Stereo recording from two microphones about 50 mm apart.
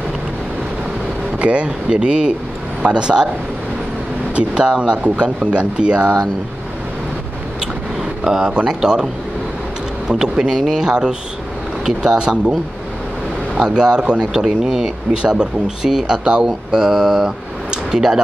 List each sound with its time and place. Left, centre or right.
1.4 s speech: right
4.4 s speech: centre
8.2 s speech: centre
13.6 s speech: centre